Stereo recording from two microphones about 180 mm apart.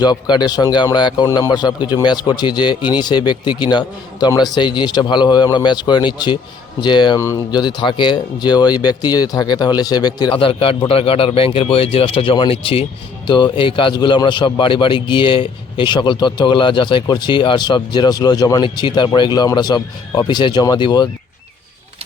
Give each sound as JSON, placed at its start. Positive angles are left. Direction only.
{"t": 0.0, "sound": "speech", "side_deg": 25}